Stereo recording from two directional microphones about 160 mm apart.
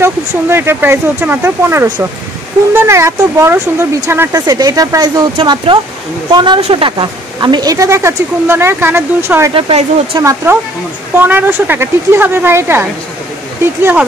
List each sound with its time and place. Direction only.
0.0 s a woman's voice: 15° right (ahead or behind)
9.5 s speech: 35° right (ahead or behind)
10.2 s speech: 15° right (ahead or behind)